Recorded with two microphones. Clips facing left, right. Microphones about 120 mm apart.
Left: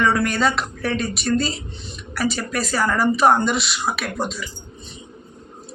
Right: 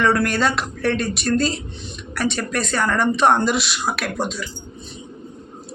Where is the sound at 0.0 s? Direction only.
Centre (ahead or behind).